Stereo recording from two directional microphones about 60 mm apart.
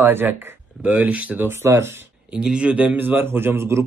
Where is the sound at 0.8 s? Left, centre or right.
Right.